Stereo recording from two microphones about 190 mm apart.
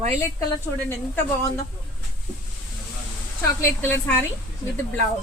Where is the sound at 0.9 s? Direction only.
15° left (ahead or behind).